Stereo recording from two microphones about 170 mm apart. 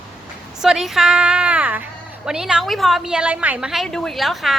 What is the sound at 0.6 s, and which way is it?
A woman's voice, centre (ahead or behind).